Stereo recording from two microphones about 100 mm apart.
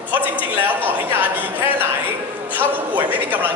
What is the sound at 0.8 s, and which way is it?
A woman's voice, 20° right (ahead or behind).